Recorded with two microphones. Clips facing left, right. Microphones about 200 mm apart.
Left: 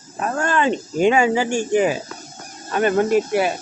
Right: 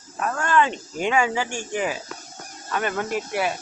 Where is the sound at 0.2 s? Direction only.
30° left (ahead or behind).